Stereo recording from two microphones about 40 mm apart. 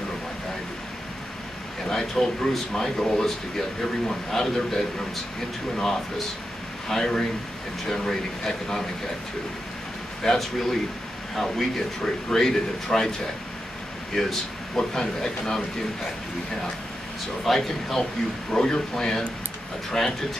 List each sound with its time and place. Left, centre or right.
1.9 s speech: centre
10.2 s speech: centre
12.0 s speech: centre
14.2 s speech: centre
17.5 s speech: centre